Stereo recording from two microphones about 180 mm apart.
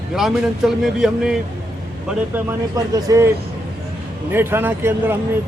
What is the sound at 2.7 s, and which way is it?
Speech, 20° right (ahead or behind).